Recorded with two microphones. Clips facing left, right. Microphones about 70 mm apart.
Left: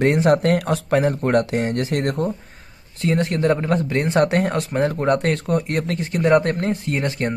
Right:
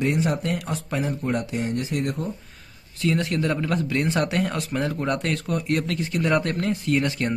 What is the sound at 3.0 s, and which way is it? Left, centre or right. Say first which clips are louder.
Speech: left 4 dB; left.